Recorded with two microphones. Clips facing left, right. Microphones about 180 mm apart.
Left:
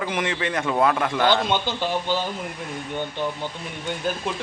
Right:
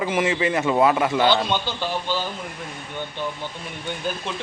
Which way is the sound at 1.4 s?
15° left (ahead or behind).